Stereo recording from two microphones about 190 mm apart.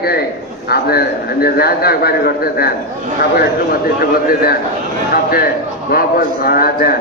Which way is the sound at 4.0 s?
50° left (ahead or behind).